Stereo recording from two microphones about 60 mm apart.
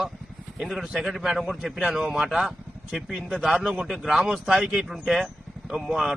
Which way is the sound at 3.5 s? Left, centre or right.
Centre.